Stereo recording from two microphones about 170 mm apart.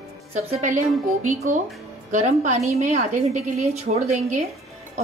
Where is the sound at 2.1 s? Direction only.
45° right (ahead or behind).